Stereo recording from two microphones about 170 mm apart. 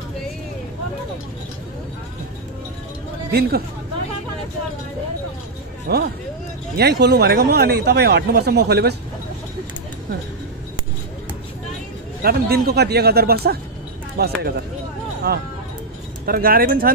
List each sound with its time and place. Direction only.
3.3 s speech: 65° right (ahead or behind)
5.9 s speech: 70° right (ahead or behind)
12.2 s speech: 65° right (ahead or behind)
16.3 s speech: 60° right (ahead or behind)